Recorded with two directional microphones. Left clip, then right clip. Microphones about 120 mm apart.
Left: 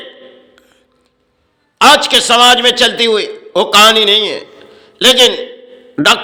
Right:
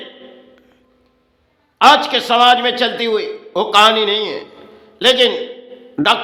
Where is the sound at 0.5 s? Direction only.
10° left (ahead or behind).